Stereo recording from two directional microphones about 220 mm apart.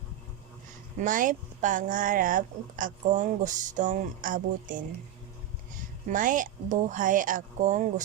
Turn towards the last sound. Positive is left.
turn(degrees=-35)  # may be behind; listen again after turning